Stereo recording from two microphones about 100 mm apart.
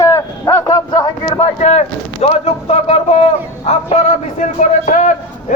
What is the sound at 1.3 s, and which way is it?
A man's voice, 85° left.